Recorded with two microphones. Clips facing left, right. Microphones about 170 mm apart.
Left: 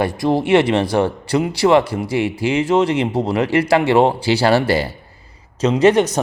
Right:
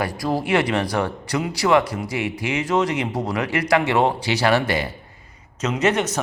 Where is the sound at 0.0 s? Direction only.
25° left (ahead or behind).